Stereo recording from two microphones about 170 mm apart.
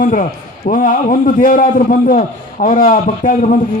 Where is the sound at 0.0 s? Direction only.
50° left (ahead or behind).